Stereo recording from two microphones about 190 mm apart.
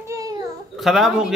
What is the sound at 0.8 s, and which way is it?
Speech, centre (ahead or behind).